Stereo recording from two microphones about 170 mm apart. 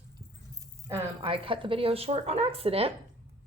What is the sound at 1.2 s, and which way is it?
Speech, 30° right (ahead or behind).